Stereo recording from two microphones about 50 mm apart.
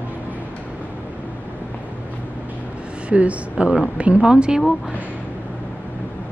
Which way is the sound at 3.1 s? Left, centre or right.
Right.